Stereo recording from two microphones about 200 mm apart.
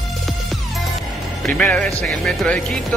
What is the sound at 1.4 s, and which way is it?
Speech, 5° left (ahead or behind).